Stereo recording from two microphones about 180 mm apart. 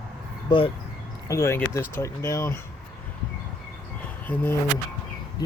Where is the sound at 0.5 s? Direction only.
25° left (ahead or behind).